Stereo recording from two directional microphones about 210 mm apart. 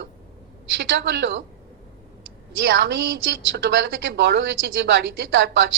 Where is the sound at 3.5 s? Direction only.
60° right (ahead or behind).